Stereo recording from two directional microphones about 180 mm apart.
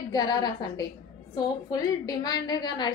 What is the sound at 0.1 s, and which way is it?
A woman's voice, 20° left (ahead or behind).